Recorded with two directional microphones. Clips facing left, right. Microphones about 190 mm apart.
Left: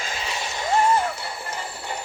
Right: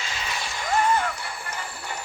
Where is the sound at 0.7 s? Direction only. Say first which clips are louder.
Left 2 dB; 30° left (ahead or behind).